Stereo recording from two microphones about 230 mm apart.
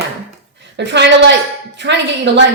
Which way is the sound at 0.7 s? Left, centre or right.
Right.